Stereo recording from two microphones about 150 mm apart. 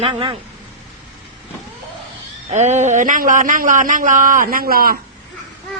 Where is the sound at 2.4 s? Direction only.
50° right (ahead or behind); by 5.0 s 80° right.